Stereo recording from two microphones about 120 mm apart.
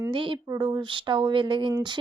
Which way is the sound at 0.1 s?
45° right (ahead or behind).